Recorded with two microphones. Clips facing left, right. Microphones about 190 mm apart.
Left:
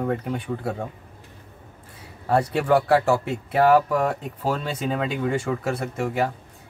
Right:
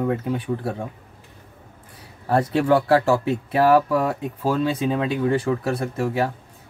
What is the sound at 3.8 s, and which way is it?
Speech, 5° right (ahead or behind).